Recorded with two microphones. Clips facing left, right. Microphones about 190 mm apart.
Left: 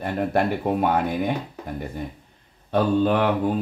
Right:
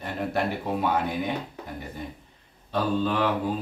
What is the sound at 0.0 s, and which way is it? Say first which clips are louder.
Mantra: left 5 dB; 50° left (ahead or behind).